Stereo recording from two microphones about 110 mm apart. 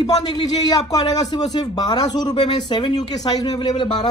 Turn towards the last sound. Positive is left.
turn(degrees=40)  # may be behind; listen again after turning